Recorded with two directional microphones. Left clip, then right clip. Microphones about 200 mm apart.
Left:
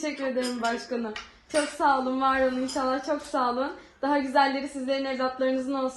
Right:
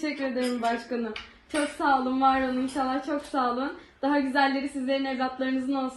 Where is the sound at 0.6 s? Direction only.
Centre (ahead or behind).